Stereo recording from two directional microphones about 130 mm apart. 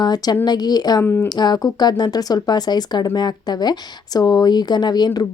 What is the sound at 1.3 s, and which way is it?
Speech, 30° left (ahead or behind).